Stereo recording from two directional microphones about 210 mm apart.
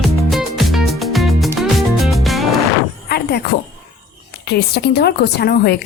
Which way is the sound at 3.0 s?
50° left (ahead or behind).